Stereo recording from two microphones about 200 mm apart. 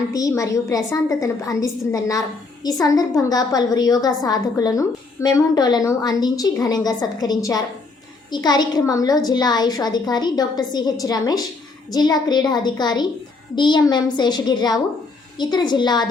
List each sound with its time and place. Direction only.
0.1 s a woman's voice: 15° left (ahead or behind)